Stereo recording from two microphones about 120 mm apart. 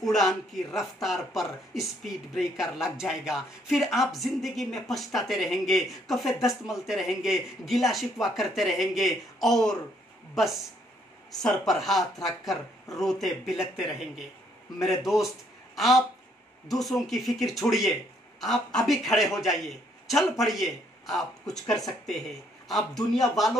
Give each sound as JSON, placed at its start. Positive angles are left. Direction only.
{"t": 0.0, "sound": "speech", "side_deg": 0}
{"t": 23.1, "sound": "speech", "side_deg": 0}